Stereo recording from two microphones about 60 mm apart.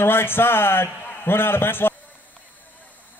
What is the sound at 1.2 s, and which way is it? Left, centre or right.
Speech, left.